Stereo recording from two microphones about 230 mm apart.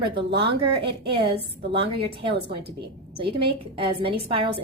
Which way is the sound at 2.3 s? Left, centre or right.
Right.